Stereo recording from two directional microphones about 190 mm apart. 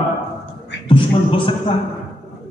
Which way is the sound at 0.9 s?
25° left (ahead or behind).